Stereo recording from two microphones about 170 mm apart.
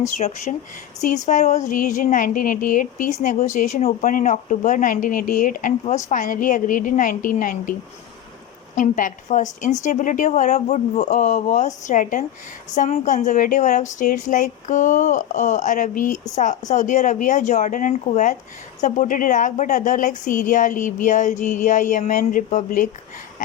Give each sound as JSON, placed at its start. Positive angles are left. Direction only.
{"t": 0.2, "sound": "a woman's voice", "side_deg": 40}